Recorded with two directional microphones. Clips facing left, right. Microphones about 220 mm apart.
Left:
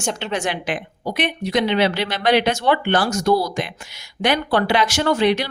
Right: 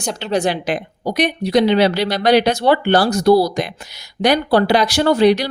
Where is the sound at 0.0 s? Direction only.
35° right (ahead or behind).